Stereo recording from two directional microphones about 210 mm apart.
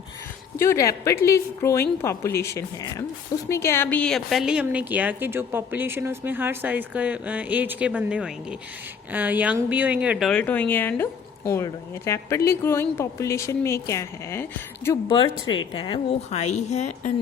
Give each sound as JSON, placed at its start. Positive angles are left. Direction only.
{"t": 0.5, "sound": "a woman's voice", "side_deg": 15}
{"t": 15.1, "sound": "a woman's voice", "side_deg": 25}